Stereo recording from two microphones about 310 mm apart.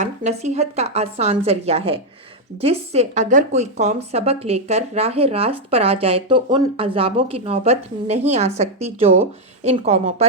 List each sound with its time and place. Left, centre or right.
0.0 s speech: right